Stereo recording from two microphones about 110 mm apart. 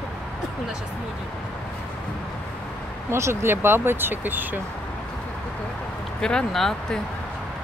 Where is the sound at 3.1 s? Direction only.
25° right (ahead or behind).